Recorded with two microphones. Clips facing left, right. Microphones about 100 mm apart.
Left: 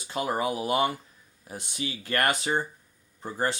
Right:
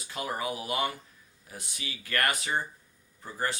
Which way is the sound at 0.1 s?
30° left (ahead or behind).